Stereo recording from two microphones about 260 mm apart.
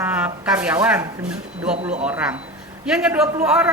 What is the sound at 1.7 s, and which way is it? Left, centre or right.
Speech, right.